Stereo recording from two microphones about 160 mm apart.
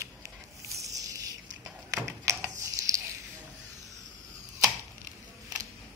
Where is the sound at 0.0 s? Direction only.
20° right (ahead or behind).